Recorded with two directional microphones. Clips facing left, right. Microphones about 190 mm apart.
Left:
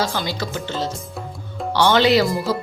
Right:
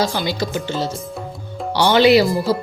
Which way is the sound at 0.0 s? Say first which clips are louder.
Right 3 dB; 15° right (ahead or behind).